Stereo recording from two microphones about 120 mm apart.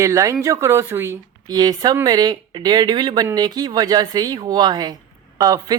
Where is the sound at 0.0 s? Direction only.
25° right (ahead or behind).